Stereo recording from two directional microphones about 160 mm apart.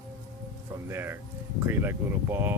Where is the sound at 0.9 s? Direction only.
15° right (ahead or behind).